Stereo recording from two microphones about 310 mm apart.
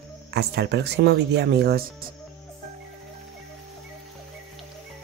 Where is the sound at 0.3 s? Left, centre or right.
Right.